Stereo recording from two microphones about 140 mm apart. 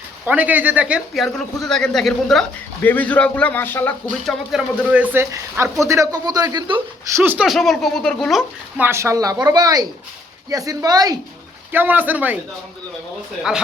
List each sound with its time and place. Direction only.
0.3 s speech: 10° right (ahead or behind); by 3.9 s 15° left (ahead or behind)
4.5 s speech: 5° right (ahead or behind)
4.9 s speech: 15° right (ahead or behind)
5.6 s speech: centre (ahead or behind)
5.9 s speech: 25° right (ahead or behind)
6.7 s speech: 15° right (ahead or behind)
7.4 s speech: centre (ahead or behind)
8.8 s speech: 20° right (ahead or behind)
11.7 s speech: 15° right (ahead or behind)